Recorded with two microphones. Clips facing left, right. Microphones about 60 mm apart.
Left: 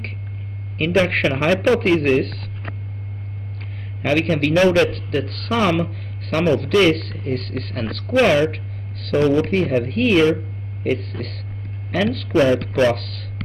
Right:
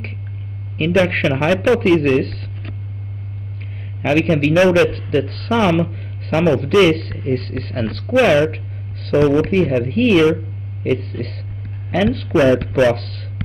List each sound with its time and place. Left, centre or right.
0.7 s a man's voice: centre
4.0 s speech: centre
5.8 s a sound: centre
6.3 s a man's voice: centre